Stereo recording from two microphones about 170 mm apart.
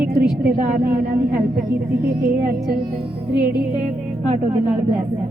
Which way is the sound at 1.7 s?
15° right (ahead or behind).